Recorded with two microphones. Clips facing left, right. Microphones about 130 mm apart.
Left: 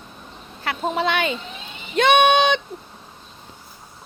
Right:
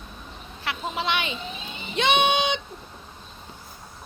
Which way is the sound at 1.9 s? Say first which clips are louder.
Left 6 dB; 55° left (ahead or behind).